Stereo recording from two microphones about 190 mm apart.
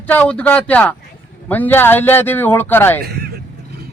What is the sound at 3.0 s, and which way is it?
Speech, 55° right (ahead or behind).